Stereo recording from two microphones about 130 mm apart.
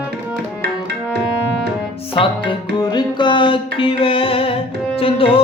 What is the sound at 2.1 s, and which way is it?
Music, 40° left (ahead or behind).